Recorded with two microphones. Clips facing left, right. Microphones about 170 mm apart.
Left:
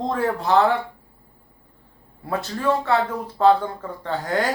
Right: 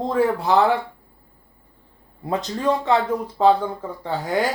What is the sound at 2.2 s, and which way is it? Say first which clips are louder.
Speech: right 1 dB; 15° right (ahead or behind).